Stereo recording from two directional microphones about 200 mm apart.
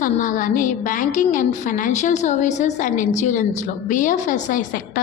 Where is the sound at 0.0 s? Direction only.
40° left (ahead or behind).